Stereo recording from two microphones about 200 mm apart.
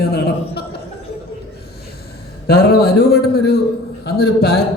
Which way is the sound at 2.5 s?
50° left (ahead or behind).